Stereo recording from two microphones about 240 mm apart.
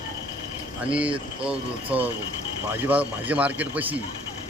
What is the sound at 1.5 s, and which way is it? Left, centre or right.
A man's voice, centre.